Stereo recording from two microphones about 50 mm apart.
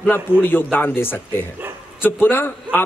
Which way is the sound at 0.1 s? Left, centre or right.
Left.